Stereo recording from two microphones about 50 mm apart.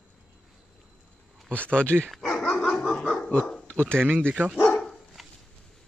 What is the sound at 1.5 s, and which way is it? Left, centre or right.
Speech, left.